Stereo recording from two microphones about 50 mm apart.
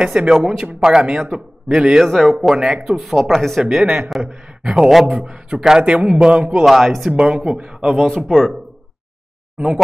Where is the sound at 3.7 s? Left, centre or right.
Centre.